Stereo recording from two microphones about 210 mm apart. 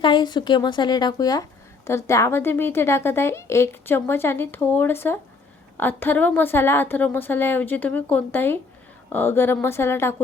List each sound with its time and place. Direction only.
0.0 s a woman's voice: 20° left (ahead or behind)